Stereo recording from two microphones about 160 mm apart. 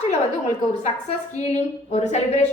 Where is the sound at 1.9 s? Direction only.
45° left (ahead or behind).